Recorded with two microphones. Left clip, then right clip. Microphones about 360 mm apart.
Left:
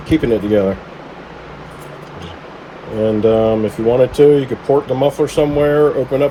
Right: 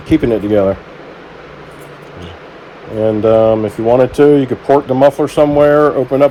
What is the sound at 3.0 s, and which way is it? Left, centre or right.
Speech, centre.